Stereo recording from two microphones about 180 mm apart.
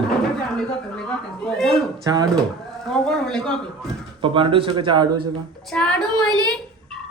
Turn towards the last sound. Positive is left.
turn(degrees=5)  # may be behind; listen again after turning